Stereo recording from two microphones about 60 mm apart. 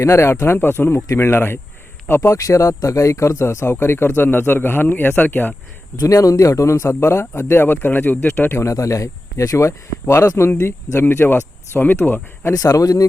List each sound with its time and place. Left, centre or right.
0.0 s speech: left
6.0 s speech: left
8.6 s speech: left
11.3 s speech: left
12.5 s speech: left